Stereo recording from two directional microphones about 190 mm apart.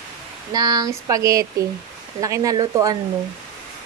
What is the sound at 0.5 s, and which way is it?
Speech, 20° right (ahead or behind).